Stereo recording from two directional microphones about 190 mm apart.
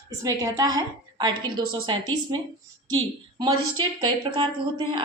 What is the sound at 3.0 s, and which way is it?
A woman's voice, 25° right (ahead or behind).